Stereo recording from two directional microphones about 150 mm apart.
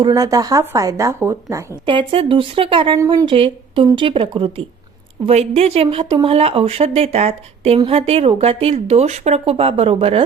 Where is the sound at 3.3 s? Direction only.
35° right (ahead or behind).